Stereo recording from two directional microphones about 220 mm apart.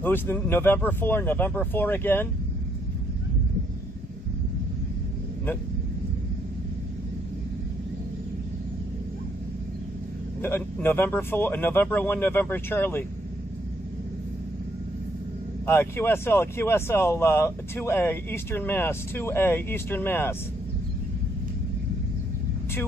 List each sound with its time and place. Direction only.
0.0 s speech: 10° left (ahead or behind)
10.4 s speech: 10° left (ahead or behind)
15.6 s speech: 10° left (ahead or behind)